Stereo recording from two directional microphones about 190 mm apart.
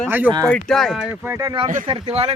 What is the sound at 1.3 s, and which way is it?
Speech, 20° right (ahead or behind).